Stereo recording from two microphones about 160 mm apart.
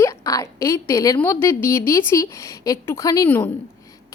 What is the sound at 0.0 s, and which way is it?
A woman's voice, 20° left (ahead or behind).